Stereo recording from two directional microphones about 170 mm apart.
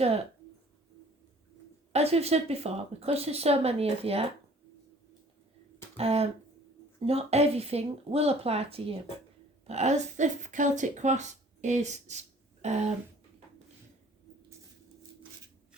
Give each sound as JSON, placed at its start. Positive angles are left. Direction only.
{"t": 1.9, "sound": "speech", "side_deg": -40}
{"t": 6.0, "sound": "speech", "side_deg": -35}